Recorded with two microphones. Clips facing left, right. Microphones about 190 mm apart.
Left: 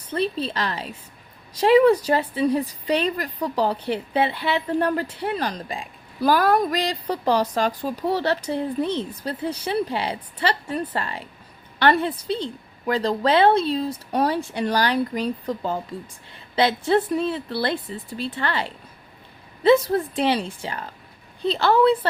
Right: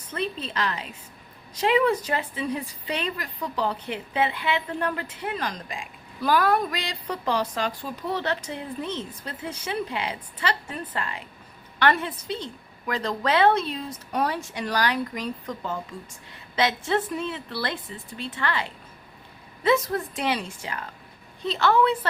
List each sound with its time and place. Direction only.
0.1 s a woman's voice: 35° left (ahead or behind)